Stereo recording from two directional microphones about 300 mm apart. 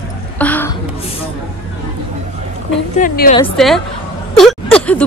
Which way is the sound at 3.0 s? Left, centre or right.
Left.